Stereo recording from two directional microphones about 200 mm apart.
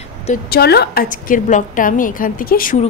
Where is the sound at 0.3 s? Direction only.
50° left (ahead or behind).